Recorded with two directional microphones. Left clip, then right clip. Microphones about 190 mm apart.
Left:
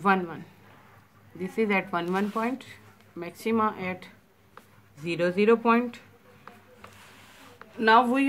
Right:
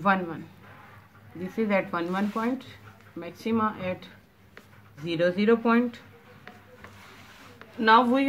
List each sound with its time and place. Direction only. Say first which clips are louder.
0.0 s speech: even; 35° left (ahead or behind)
1.4 s speech: even; 40° left (ahead or behind)
7.8 s speech: even; 30° left (ahead or behind)